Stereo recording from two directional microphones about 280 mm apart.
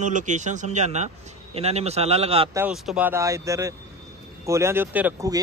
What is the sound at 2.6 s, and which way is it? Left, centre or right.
Speech, centre.